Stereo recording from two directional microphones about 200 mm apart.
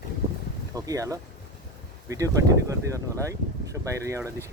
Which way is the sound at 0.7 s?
15° right (ahead or behind).